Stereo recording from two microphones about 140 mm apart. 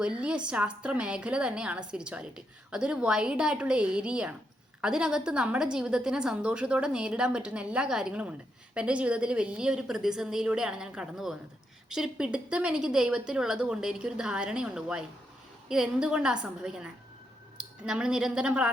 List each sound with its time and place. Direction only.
0.0 s a woman's voice: 5° right (ahead or behind)